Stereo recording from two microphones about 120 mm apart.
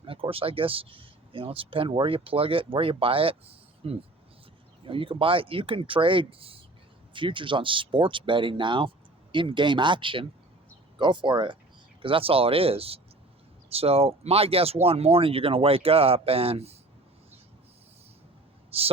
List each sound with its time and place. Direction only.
0.0 s speech: 50° right (ahead or behind)
18.7 s speech: 55° right (ahead or behind)